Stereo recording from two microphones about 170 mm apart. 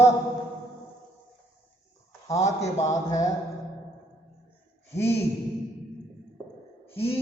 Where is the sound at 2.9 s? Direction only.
20° left (ahead or behind).